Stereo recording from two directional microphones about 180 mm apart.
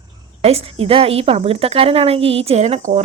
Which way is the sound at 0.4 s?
35° right (ahead or behind).